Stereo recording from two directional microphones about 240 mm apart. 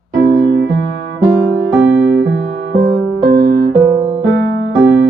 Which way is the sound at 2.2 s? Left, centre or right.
Right.